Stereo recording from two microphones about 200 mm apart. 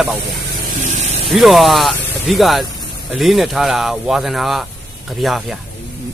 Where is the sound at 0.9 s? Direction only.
35° right (ahead or behind).